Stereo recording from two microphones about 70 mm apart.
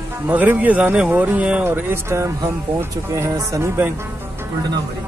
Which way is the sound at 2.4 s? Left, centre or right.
Right.